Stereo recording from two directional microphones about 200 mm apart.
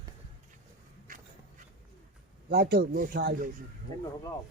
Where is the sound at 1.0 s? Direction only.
40° right (ahead or behind).